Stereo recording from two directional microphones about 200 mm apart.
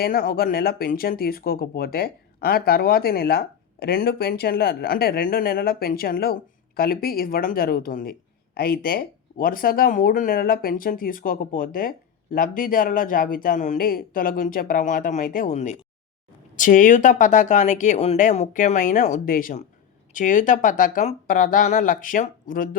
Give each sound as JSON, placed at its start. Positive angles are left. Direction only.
{"t": 0.0, "sound": "speech", "side_deg": 50}